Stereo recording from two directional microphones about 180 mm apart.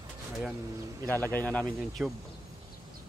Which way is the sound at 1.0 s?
10° left (ahead or behind).